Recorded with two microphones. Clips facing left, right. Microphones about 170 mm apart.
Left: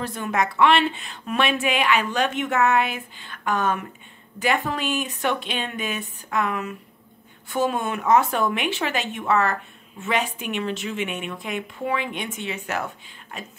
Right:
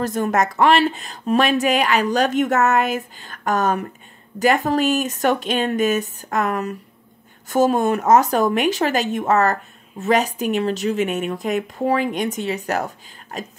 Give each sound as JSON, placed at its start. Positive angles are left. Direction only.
{"t": 0.0, "sound": "speech", "side_deg": -45}